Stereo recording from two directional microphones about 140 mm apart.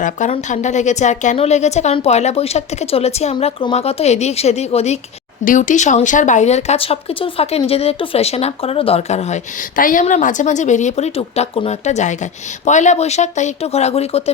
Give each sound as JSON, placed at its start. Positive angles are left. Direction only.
{"t": 0.3, "sound": "speech", "side_deg": 60}
{"t": 5.5, "sound": "speech", "side_deg": 65}
{"t": 9.7, "sound": "speech", "side_deg": 75}